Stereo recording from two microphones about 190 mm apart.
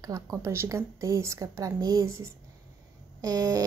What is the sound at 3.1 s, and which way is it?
Fart, 20° right (ahead or behind).